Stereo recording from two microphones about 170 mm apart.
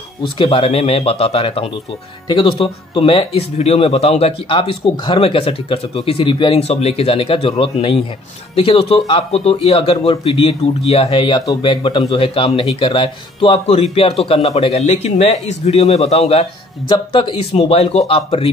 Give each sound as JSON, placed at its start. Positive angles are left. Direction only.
{"t": 0.2, "sound": "speech", "side_deg": 30}